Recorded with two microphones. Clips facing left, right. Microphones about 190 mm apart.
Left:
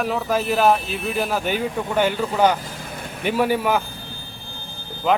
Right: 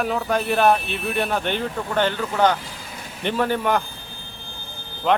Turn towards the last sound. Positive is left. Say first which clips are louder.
# even
turn(degrees=5)  # may be behind; listen again after turning